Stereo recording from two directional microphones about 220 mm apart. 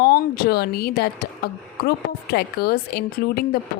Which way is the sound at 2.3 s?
45° left (ahead or behind).